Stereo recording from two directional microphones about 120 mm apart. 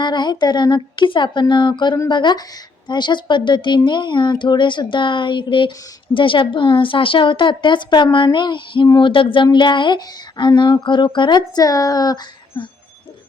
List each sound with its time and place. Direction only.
0.0 s a woman's voice: 40° left (ahead or behind)